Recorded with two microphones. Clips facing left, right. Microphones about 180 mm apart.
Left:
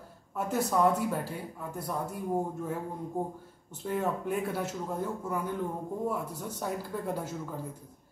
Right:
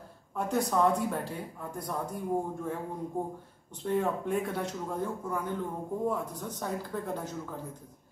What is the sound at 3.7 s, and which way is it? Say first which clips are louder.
A man's voice: right 2 dB; 5° left (ahead or behind).